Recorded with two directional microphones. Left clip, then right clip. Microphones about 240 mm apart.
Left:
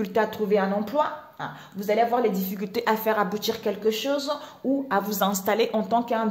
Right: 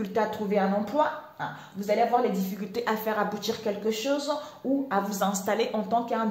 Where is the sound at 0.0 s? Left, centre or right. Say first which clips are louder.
Left 3 dB; left.